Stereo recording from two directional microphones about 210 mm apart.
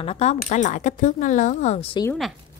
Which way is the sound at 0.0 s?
30° left (ahead or behind).